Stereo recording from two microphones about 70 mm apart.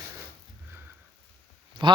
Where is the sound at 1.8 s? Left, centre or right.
Right.